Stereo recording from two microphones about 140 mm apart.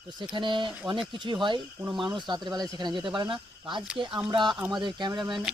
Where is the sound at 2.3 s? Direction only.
30° right (ahead or behind).